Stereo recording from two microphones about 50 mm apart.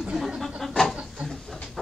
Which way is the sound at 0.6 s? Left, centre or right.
Centre.